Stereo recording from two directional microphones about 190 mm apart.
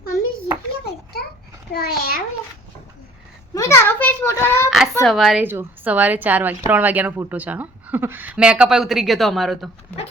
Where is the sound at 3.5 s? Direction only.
15° left (ahead or behind).